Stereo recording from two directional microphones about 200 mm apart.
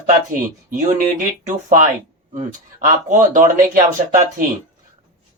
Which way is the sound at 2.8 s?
40° right (ahead or behind).